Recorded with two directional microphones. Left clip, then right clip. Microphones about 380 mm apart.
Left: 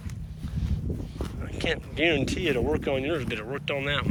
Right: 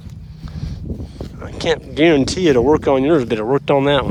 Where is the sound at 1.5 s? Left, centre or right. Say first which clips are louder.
Right 11 dB; centre.